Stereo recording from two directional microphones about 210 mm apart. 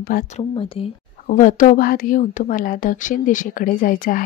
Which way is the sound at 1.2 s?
40° left (ahead or behind).